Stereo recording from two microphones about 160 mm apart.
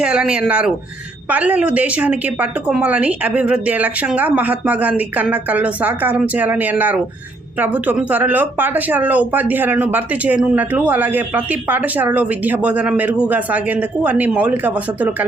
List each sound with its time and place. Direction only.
0.0 s speech: 5° right (ahead or behind)